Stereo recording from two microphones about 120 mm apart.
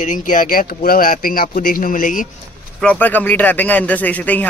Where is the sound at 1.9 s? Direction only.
90° left.